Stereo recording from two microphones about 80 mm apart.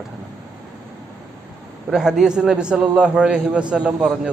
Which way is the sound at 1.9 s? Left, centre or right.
Centre.